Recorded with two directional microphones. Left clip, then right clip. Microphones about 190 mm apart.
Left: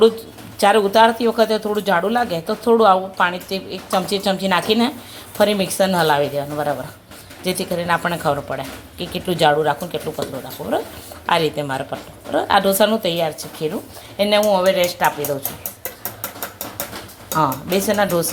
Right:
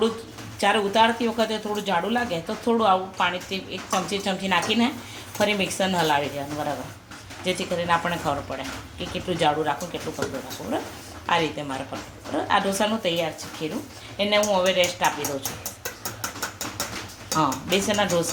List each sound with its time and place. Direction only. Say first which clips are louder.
0.6 s a woman's voice: left 7 dB; 40° left (ahead or behind)
17.2 s speech: left 5 dB; 30° left (ahead or behind)